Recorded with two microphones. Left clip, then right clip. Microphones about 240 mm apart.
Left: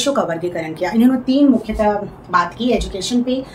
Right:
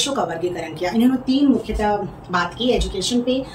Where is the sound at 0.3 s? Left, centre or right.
Centre.